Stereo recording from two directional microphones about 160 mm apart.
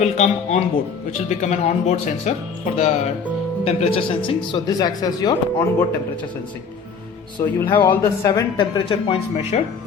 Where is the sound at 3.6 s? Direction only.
40° left (ahead or behind).